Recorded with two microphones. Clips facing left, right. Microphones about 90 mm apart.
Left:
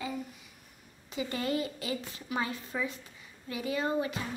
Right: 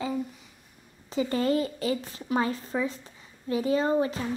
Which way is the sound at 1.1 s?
35° right (ahead or behind).